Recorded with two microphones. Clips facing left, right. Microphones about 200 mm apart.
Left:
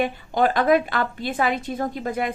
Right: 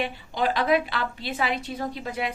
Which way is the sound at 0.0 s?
50° left (ahead or behind).